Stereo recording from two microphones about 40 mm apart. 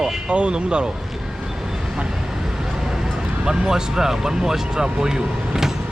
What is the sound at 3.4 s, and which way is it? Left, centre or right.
Speech, centre.